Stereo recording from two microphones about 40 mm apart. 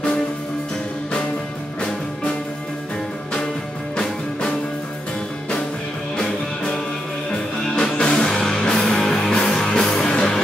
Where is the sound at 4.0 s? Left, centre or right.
Left.